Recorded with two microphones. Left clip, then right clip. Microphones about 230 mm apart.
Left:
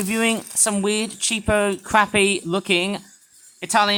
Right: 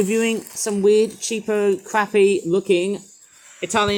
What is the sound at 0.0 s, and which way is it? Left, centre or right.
Speech, centre.